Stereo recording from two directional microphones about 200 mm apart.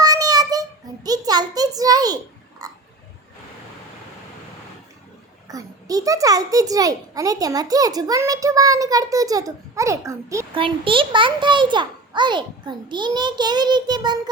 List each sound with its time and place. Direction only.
0.0 s child singing: 20° right (ahead or behind)
2.6 s a sound: 20° right (ahead or behind)
5.5 s a child's voice: 15° right (ahead or behind)
10.5 s a child's voice: 25° right (ahead or behind)